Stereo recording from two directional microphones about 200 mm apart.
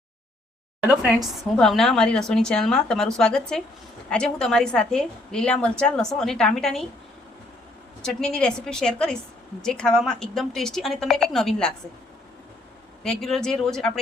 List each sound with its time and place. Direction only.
0.9 s a woman's voice: 5° right (ahead or behind)
8.0 s a woman's voice: 5° left (ahead or behind)
13.0 s a woman's voice: 5° left (ahead or behind)